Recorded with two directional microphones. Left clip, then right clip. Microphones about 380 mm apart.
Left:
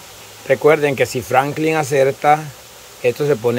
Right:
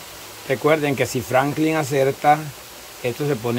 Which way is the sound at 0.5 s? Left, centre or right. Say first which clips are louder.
Left 5 dB; centre.